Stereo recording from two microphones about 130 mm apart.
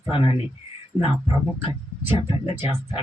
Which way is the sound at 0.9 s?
5° right (ahead or behind).